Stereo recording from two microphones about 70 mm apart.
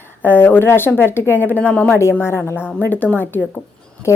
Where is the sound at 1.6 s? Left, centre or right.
Left.